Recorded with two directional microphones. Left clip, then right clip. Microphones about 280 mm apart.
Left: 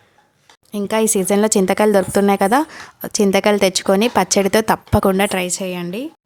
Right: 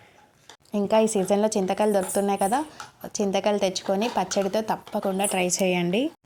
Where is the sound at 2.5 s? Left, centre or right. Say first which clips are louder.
Left 9 dB; left.